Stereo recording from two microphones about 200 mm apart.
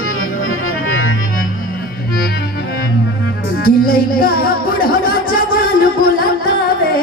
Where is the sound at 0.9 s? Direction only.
90° left.